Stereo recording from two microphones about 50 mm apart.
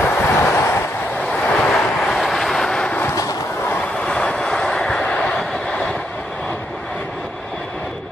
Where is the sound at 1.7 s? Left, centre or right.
Centre.